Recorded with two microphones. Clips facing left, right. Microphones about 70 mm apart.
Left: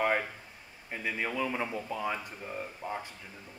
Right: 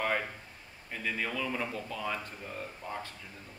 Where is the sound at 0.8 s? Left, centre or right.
Centre.